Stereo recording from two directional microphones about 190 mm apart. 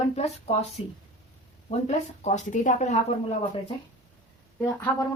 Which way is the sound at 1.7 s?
35° left (ahead or behind).